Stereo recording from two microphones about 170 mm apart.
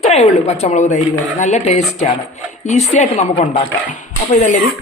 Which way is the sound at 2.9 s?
40° left (ahead or behind).